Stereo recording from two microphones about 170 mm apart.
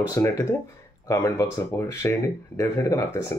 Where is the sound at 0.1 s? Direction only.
15° left (ahead or behind).